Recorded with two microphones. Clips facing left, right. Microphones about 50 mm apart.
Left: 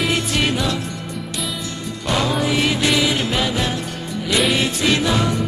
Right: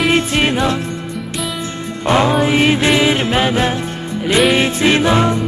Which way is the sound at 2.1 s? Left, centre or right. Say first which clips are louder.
Right 6 dB; right.